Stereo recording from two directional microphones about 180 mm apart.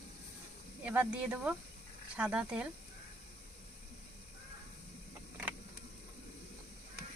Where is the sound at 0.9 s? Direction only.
10° right (ahead or behind).